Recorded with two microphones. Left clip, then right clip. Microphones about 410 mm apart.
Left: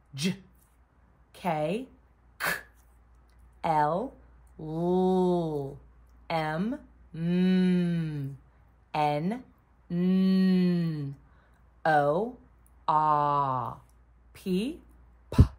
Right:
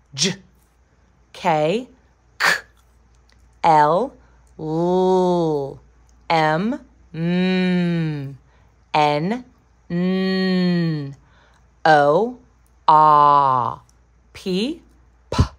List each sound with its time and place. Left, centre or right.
0.1 s speech: centre
2.3 s cough: centre
3.3 s a sound: centre
4.6 s mantra: right
6.2 s a woman's voice: centre
15.2 s cough: centre